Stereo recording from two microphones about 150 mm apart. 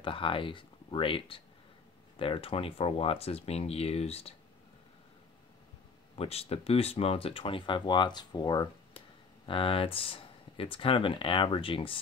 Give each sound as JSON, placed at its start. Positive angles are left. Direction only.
{"t": 0.0, "sound": "speech", "side_deg": 35}
{"t": 6.1, "sound": "speech", "side_deg": 40}
{"t": 9.5, "sound": "speech", "side_deg": 35}